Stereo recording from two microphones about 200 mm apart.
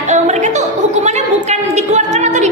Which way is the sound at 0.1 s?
35° right (ahead or behind).